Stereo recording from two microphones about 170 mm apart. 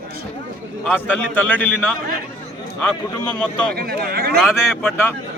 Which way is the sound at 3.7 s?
65° right (ahead or behind).